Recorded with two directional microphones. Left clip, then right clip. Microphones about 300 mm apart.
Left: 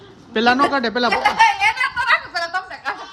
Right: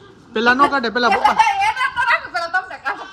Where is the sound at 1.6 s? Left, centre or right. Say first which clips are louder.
Even; centre.